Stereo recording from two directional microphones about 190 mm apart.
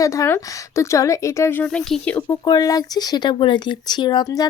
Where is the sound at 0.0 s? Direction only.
15° left (ahead or behind).